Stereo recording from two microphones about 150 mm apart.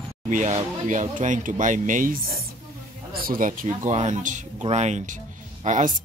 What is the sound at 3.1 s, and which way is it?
Speech, 75° right (ahead or behind).